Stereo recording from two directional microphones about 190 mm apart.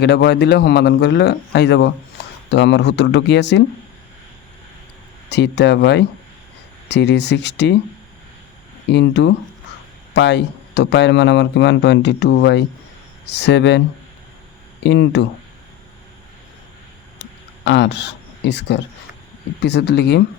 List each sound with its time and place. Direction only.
0.0 s speech: 65° left (ahead or behind)
5.3 s speech: 65° left (ahead or behind)
8.9 s speech: 65° left (ahead or behind)
14.8 s speech: 70° left (ahead or behind)
17.7 s speech: 65° left (ahead or behind)